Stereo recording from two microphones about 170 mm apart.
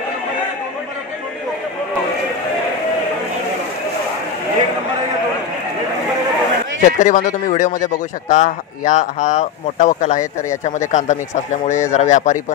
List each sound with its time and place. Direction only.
6.8 s speech: 45° left (ahead or behind)